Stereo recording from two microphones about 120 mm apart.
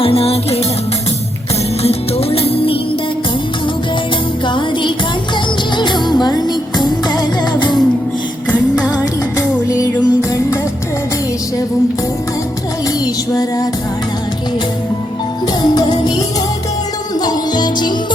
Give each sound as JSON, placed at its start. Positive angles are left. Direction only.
{"t": 0.0, "sound": "music", "side_deg": 55}
{"t": 1.8, "sound": "music", "side_deg": 55}
{"t": 4.4, "sound": "music", "side_deg": 40}
{"t": 8.5, "sound": "music", "side_deg": -15}
{"t": 9.6, "sound": "music", "side_deg": 30}
{"t": 15.6, "sound": "music", "side_deg": 35}
{"t": 17.2, "sound": "music", "side_deg": 35}